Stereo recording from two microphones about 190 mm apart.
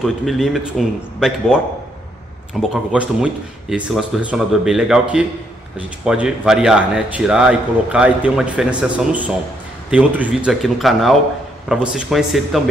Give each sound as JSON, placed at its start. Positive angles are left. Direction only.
{"t": 0.0, "sound": "speech", "side_deg": 0}
{"t": 2.6, "sound": "speech", "side_deg": -5}